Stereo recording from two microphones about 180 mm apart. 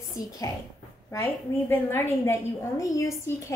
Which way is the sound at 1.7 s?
15° left (ahead or behind).